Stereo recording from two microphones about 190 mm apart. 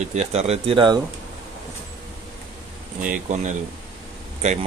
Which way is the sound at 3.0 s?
40° right (ahead or behind).